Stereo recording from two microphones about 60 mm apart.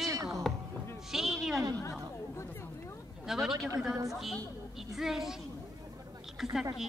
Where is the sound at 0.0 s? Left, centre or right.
Right.